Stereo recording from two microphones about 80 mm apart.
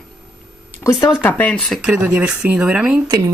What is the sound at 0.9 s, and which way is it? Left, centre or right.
Speech, left.